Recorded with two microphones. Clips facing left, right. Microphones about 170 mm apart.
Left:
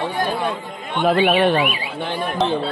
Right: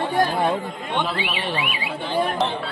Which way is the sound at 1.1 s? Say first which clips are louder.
Left 11 dB; 55° left (ahead or behind).